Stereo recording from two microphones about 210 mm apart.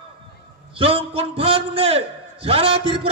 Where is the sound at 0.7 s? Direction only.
25° right (ahead or behind).